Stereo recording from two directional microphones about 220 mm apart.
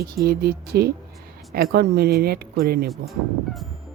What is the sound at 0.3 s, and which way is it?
Speech, 45° right (ahead or behind).